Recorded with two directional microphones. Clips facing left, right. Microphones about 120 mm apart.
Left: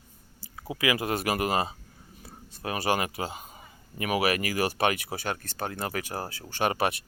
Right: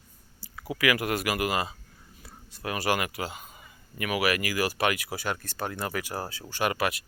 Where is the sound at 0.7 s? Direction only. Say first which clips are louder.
Right 1 dB; 25° left (ahead or behind).